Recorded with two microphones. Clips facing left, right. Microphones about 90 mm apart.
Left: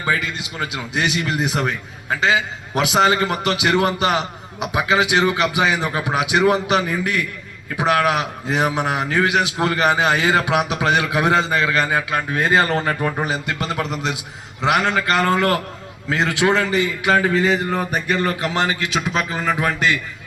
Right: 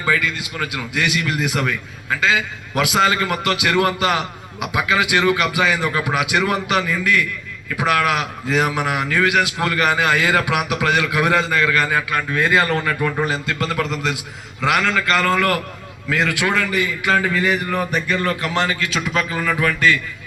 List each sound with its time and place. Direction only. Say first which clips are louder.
0.0 s a man's voice: right 2 dB; 20° left (ahead or behind)
13.2 s a man's voice: right 1 dB; 20° left (ahead or behind)